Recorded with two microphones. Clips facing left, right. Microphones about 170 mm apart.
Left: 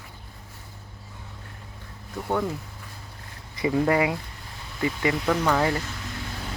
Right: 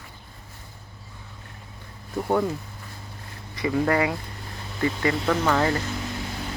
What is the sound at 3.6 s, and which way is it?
Speech, 20° left (ahead or behind).